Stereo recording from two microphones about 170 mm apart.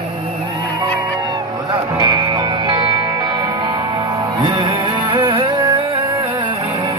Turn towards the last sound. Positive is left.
turn(degrees=-25)  # may be behind; listen again after turning